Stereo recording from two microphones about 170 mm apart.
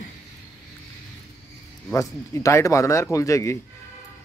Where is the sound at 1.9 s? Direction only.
20° left (ahead or behind).